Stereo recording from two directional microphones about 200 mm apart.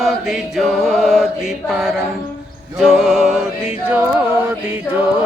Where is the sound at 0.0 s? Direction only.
Centre (ahead or behind).